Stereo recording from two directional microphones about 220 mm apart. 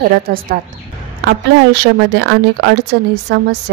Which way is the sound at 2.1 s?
50° right (ahead or behind).